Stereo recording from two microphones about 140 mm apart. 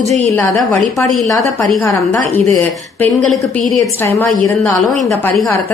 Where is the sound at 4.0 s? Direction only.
15° left (ahead or behind).